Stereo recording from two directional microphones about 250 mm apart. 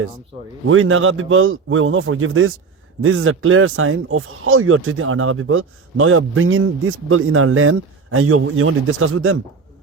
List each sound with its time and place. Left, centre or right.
0.7 s speech: right